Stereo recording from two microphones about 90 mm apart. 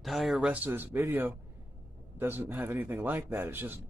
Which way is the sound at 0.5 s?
20° right (ahead or behind).